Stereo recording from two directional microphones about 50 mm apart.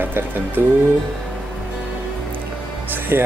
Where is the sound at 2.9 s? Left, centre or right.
Right.